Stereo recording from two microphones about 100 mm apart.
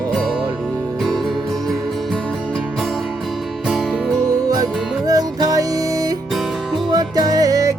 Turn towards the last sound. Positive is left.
turn(degrees=-35)  # may be behind; listen again after turning